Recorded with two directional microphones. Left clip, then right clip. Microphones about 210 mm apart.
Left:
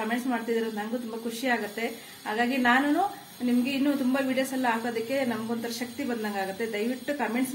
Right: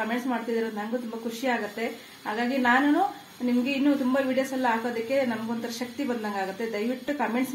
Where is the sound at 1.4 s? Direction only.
20° right (ahead or behind).